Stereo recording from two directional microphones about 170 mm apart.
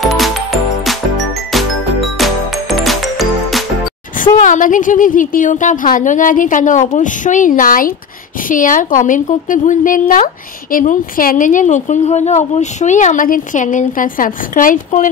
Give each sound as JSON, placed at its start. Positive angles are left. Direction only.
{"t": 0.0, "sound": "music", "side_deg": 0}
{"t": 1.5, "sound": "music", "side_deg": 0}
{"t": 4.2, "sound": "a woman's voice", "side_deg": 50}